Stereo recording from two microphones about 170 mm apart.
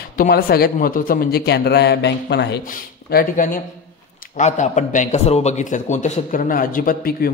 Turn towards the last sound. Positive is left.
turn(degrees=60)  # may be behind; listen again after turning